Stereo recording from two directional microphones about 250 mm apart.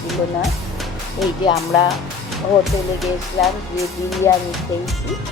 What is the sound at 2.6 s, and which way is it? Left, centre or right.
Speech, centre.